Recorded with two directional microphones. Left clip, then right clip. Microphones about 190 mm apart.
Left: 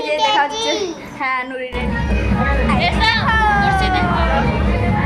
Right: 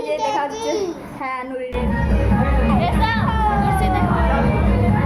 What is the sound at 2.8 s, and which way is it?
Music, 50° right (ahead or behind).